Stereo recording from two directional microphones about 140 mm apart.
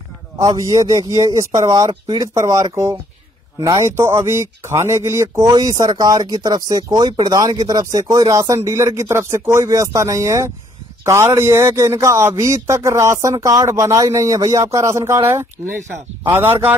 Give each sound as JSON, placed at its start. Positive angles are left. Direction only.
{"t": 0.4, "sound": "speech", "side_deg": -25}